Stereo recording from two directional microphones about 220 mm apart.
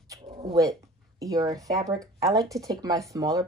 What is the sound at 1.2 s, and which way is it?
Speech, 15° right (ahead or behind).